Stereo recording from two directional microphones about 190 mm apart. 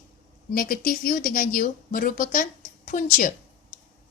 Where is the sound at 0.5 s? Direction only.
50° left (ahead or behind).